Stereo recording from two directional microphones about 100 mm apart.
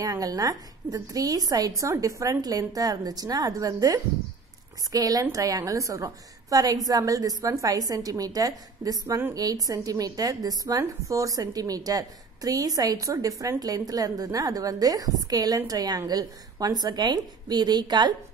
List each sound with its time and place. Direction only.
0.0 s a woman's voice: 35° right (ahead or behind)